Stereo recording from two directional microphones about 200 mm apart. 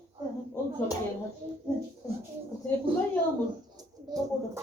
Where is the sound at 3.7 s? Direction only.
20° right (ahead or behind).